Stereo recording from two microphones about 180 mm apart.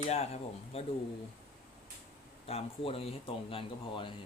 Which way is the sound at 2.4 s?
35° left (ahead or behind).